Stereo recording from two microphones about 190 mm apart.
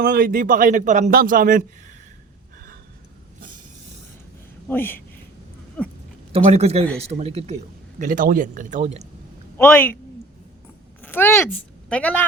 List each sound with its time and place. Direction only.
0.0 s a man's voice: 50° right (ahead or behind)
4.7 s a woman's voice: 10° left (ahead or behind)
6.3 s a man's voice: 35° right (ahead or behind)
9.6 s a woman's voice: 10° left (ahead or behind)
11.0 s speech: 10° left (ahead or behind)